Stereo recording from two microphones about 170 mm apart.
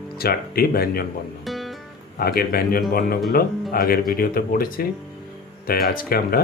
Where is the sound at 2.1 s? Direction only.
60° left (ahead or behind).